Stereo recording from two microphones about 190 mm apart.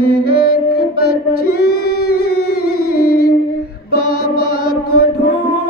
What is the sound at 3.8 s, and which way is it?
Mantra, 55° left (ahead or behind).